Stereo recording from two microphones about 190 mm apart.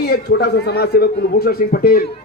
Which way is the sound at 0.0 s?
55° left (ahead or behind).